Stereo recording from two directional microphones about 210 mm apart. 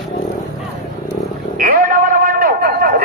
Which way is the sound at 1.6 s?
45° right (ahead or behind).